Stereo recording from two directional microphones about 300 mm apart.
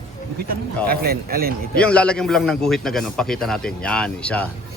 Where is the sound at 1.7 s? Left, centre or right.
Centre.